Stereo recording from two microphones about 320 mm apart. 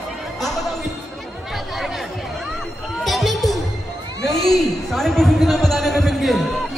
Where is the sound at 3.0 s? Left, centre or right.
Centre.